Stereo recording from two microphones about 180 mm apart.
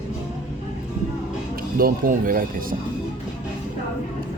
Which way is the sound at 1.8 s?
55° right (ahead or behind).